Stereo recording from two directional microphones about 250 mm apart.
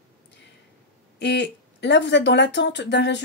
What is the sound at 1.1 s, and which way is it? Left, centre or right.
A woman's voice, left.